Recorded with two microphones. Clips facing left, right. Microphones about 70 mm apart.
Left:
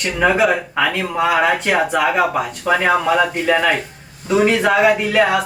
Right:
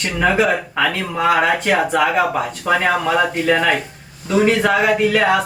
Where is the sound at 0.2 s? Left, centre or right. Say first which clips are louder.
Left 1 dB; centre.